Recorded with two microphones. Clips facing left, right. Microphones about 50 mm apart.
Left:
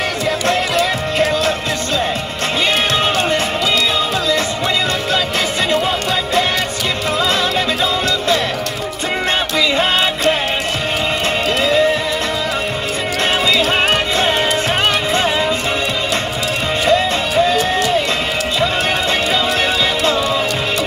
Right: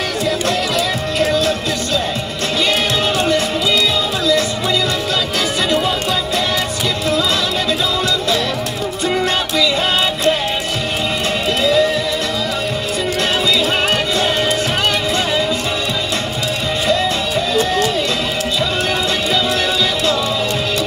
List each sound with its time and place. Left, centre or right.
0.5 s music: left
3.2 s music: left
9.6 s music: left
11.6 s music: left
16.8 s music: left